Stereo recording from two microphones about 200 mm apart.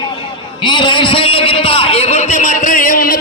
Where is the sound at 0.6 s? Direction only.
25° left (ahead or behind).